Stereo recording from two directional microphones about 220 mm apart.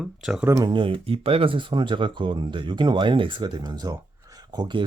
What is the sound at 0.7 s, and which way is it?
Speech, 25° right (ahead or behind).